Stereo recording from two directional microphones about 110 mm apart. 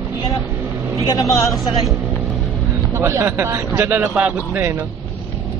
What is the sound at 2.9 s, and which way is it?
A man's voice, 25° right (ahead or behind).